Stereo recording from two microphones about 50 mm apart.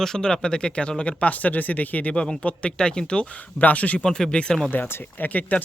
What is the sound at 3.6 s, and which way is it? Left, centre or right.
Speech, left.